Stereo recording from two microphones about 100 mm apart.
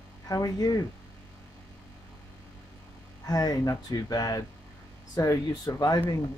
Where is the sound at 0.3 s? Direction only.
40° left (ahead or behind).